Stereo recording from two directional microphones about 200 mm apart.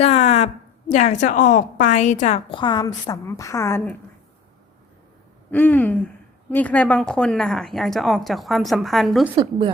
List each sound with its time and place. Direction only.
0.0 s a woman's voice: 35° left (ahead or behind); by 3.9 s 10° left (ahead or behind)
5.5 s hoot: 5° left (ahead or behind)
6.5 s speech: 5° left (ahead or behind)
9.3 s speech: 25° right (ahead or behind)